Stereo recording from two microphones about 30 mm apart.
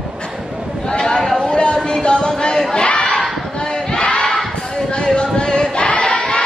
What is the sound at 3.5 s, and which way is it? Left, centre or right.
Battle cry, left.